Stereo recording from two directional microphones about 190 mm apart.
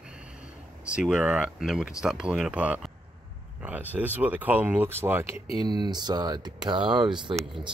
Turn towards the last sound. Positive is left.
turn(degrees=-30)  # may be behind; listen again after turning